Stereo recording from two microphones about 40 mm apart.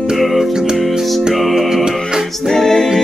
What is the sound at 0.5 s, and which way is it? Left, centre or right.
Music, centre.